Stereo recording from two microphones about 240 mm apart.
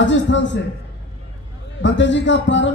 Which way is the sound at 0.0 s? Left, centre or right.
Left.